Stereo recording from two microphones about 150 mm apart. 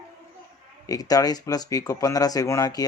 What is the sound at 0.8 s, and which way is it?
Speech, 25° left (ahead or behind).